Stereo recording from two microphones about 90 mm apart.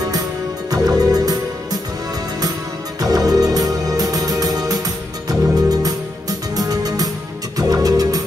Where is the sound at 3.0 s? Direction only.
40° right (ahead or behind).